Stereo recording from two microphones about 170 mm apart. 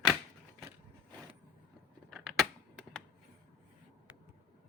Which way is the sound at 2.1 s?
Centre (ahead or behind).